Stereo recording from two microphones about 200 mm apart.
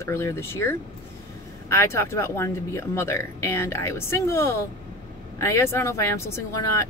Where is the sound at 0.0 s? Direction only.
15° left (ahead or behind).